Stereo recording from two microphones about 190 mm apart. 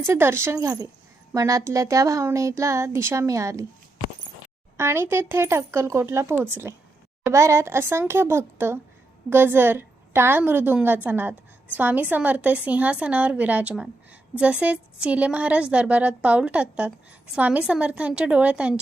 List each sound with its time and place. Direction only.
0.0 s a woman's voice: 15° right (ahead or behind)
4.8 s a woman's voice: 15° right (ahead or behind)